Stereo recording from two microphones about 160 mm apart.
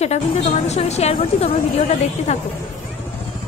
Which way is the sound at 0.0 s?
40° left (ahead or behind).